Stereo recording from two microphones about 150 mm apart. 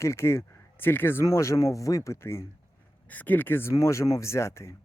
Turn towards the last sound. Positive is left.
turn(degrees=20)  # may be behind; listen again after turning